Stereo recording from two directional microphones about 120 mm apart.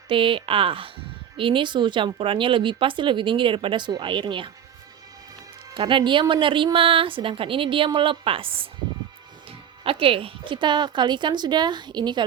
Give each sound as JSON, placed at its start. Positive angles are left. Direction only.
{"t": 0.1, "sound": "speech", "side_deg": -45}
{"t": 5.7, "sound": "speech", "side_deg": -40}
{"t": 9.8, "sound": "a woman's voice", "side_deg": -50}